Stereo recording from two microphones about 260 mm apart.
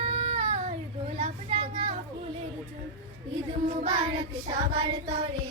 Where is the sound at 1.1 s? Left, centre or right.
Right.